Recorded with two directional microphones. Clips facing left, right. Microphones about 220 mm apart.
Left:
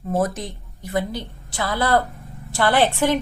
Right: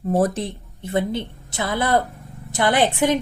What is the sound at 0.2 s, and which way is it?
A woman's voice, 30° right (ahead or behind).